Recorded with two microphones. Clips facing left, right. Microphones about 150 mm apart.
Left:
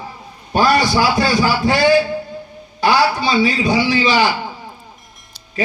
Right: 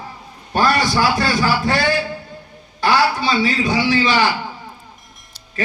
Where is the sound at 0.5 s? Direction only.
15° left (ahead or behind).